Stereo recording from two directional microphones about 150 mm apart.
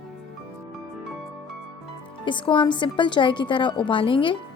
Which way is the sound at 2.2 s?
35° left (ahead or behind).